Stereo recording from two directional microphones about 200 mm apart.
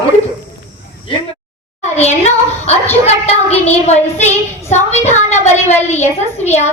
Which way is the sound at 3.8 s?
35° left (ahead or behind).